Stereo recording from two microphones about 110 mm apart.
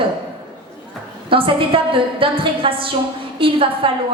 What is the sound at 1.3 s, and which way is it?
A woman's voice, 55° right (ahead or behind).